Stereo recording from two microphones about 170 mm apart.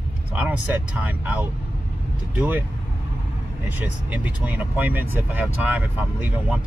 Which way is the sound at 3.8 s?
10° right (ahead or behind).